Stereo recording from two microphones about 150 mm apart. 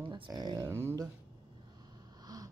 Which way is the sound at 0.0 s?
35° right (ahead or behind).